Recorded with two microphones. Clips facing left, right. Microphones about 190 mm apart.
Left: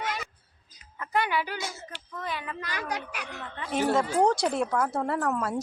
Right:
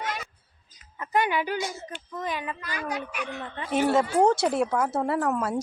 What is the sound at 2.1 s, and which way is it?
Speech, 15° right (ahead or behind).